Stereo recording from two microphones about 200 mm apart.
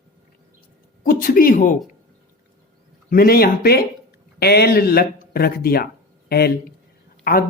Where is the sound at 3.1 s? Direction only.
50° left (ahead or behind).